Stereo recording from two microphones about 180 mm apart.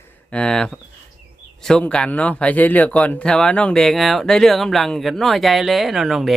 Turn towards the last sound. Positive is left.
turn(degrees=0)  # may be behind; listen again after turning